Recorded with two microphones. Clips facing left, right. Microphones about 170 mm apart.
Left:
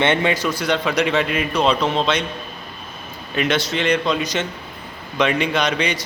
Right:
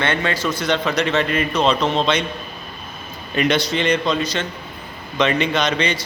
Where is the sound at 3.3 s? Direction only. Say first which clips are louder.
Right 2 dB; centre (ahead or behind).